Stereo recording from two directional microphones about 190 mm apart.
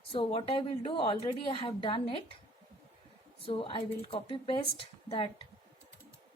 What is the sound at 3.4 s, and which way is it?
A woman's voice, 25° left (ahead or behind).